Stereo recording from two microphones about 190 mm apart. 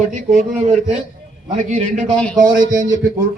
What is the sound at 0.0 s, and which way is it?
Speech, 40° right (ahead or behind).